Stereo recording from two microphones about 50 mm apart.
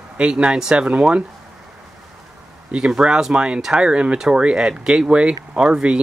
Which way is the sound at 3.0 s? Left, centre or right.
Centre.